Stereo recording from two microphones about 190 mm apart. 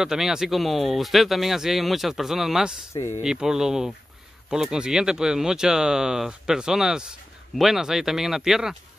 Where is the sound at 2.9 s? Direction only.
15° left (ahead or behind).